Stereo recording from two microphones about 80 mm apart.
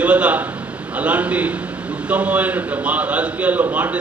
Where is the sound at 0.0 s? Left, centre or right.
Centre.